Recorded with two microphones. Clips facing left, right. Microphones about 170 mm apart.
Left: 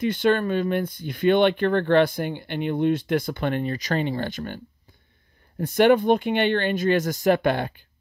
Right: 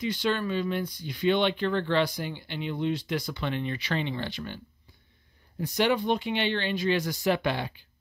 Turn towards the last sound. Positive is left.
turn(degrees=50)  # may be behind; listen again after turning